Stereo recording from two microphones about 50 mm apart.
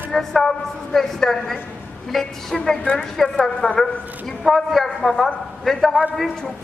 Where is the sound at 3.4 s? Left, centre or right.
Centre.